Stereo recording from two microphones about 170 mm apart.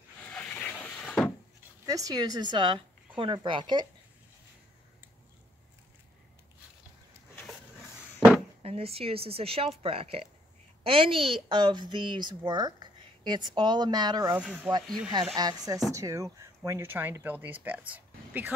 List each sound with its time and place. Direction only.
0.2 s a sound: 10° left (ahead or behind)
1.9 s speech: 20° right (ahead or behind)
8.2 s a sound: 25° right (ahead or behind)
8.6 s speech: 35° right (ahead or behind)
14.3 s speech: 10° right (ahead or behind)
15.3 s speech: 20° right (ahead or behind)